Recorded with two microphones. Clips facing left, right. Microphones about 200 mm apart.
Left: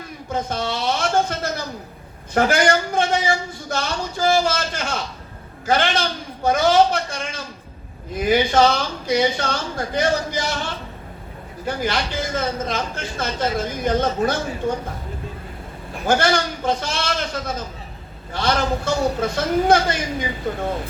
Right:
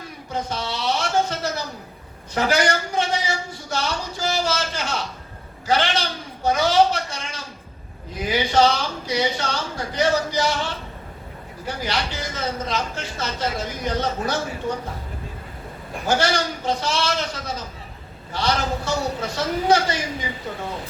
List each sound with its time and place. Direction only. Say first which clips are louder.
0.3 s a sound: left 3 dB; 50° left (ahead or behind)
5.6 s a man's voice: left 2 dB; 50° left (ahead or behind)
11.6 s a man's voice: left 3 dB; 50° left (ahead or behind)
16.0 s a man's voice: left 3 dB; 50° left (ahead or behind)